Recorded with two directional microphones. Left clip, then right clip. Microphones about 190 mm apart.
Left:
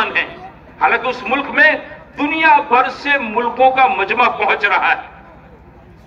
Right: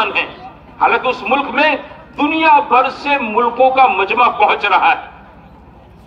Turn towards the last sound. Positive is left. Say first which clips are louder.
# right 2 dB
turn(degrees=5)  # may be behind; listen again after turning